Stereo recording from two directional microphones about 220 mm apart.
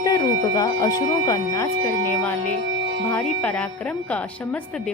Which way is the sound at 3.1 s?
5° left (ahead or behind).